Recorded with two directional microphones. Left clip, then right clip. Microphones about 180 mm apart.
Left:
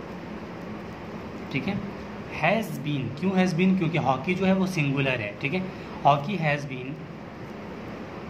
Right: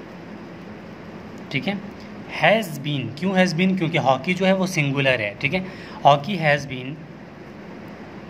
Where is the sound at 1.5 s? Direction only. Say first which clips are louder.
Right 5 dB; 45° right (ahead or behind).